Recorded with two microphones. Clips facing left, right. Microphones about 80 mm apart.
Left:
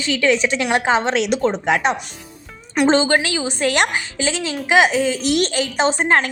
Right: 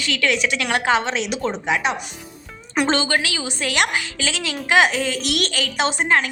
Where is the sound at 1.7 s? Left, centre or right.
Left.